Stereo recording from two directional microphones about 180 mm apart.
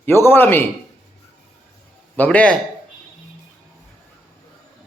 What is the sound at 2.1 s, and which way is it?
Speech, 10° left (ahead or behind).